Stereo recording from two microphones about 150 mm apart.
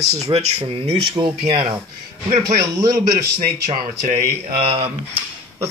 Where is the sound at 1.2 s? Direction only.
25° right (ahead or behind).